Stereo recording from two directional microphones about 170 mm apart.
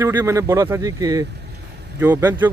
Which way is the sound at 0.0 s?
15° right (ahead or behind).